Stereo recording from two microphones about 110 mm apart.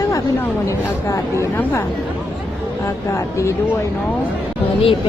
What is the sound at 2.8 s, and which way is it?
Speech, 25° left (ahead or behind).